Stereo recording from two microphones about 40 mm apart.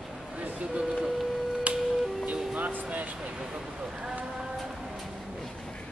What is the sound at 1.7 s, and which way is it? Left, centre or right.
Music, right.